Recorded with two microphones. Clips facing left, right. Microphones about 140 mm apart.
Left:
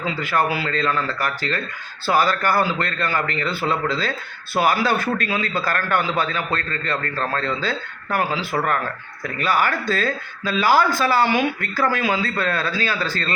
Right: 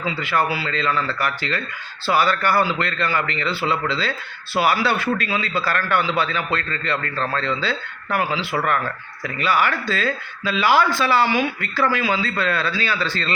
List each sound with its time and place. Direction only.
0.0 s a man's voice: 45° left (ahead or behind)